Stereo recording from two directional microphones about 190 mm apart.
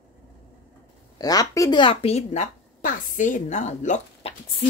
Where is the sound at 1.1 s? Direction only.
20° left (ahead or behind); by 4.3 s 40° left (ahead or behind).